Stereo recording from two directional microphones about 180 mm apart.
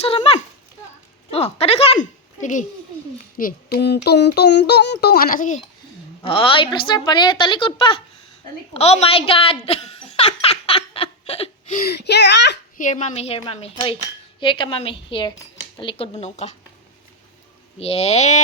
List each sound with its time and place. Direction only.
0.0 s a sound: 35° left (ahead or behind)
3.3 s speech: 55° left (ahead or behind)
6.2 s a woman's voice: 30° left (ahead or behind)
8.7 s a sound: 35° left (ahead or behind)
11.8 s a child's voice: 65° left (ahead or behind)
12.7 s a woman's voice: 45° left (ahead or behind)
17.7 s speech: 35° left (ahead or behind)